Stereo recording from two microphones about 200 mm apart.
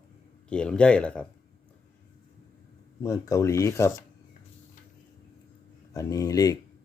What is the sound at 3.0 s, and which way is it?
Speech, 15° left (ahead or behind).